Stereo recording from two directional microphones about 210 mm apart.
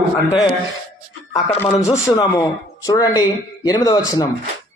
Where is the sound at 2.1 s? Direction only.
20° left (ahead or behind).